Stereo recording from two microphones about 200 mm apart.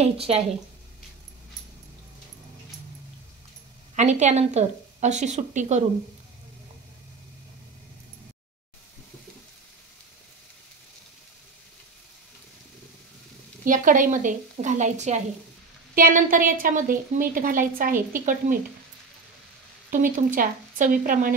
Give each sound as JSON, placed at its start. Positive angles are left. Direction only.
{"t": 0.0, "sound": "a woman's voice", "side_deg": -30}
{"t": 3.9, "sound": "a woman's voice", "side_deg": -35}
{"t": 13.7, "sound": "a woman's voice", "side_deg": -40}
{"t": 19.9, "sound": "a woman's voice", "side_deg": -40}